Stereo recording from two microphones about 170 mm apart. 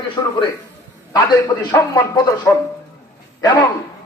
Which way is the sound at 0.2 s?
20° left (ahead or behind).